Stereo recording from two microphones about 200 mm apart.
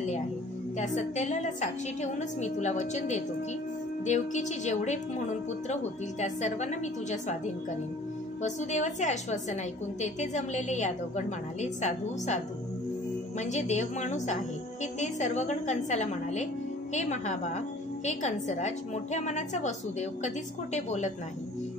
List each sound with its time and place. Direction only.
0.7 s a woman's voice: 35° left (ahead or behind)
13.4 s a woman's voice: 35° left (ahead or behind)